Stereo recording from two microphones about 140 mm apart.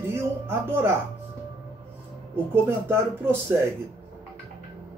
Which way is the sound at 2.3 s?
15° right (ahead or behind).